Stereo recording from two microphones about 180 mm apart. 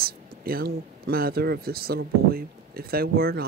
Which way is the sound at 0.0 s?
55° right (ahead or behind).